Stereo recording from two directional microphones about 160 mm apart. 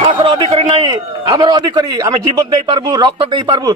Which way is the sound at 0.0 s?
30° right (ahead or behind).